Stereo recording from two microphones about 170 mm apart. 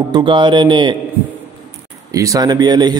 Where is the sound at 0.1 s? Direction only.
30° right (ahead or behind).